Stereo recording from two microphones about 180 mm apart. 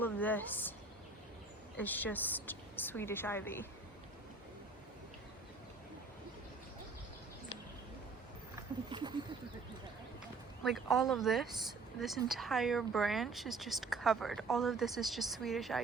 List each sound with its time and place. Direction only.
0.0 s a woman's voice: 10° left (ahead or behind)
1.8 s speech: 10° left (ahead or behind)
8.9 s speech: 25° right (ahead or behind)
10.6 s speech: centre (ahead or behind)